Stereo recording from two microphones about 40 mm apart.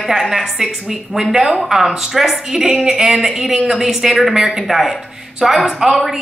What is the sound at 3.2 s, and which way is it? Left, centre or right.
Speech, centre.